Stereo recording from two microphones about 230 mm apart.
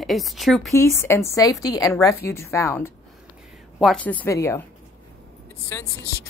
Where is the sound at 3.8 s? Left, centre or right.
Centre.